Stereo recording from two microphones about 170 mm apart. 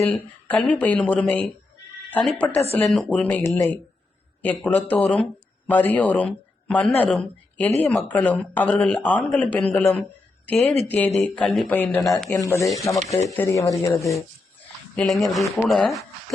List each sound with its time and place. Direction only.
0.1 s speech: 10° left (ahead or behind)
12.4 s speech: 15° left (ahead or behind)
12.6 s speech: centre (ahead or behind)
13.2 s speech: 10° left (ahead or behind)
14.9 s speech: centre (ahead or behind)